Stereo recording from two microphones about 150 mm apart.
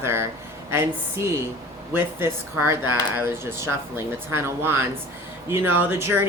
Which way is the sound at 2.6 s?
15° right (ahead or behind).